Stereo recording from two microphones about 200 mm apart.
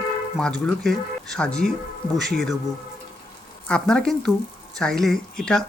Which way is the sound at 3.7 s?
5° left (ahead or behind).